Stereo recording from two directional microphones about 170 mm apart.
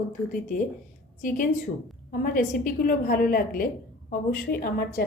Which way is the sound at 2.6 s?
55° left (ahead or behind).